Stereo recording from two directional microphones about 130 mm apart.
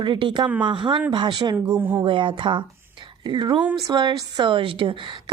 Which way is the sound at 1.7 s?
15° right (ahead or behind).